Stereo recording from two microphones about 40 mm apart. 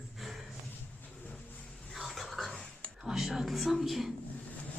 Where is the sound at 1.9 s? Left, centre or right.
Centre.